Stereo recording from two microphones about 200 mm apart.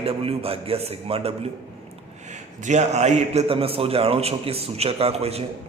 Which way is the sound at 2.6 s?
35° right (ahead or behind).